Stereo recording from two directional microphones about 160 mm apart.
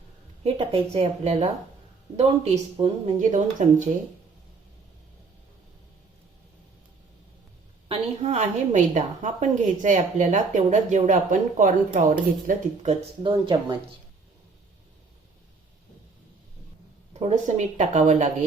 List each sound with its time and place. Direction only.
0.4 s a woman's voice: 35° right (ahead or behind)
7.9 s a woman's voice: 40° right (ahead or behind)
13.2 s a woman's voice: 30° right (ahead or behind)
17.2 s a woman's voice: 45° right (ahead or behind)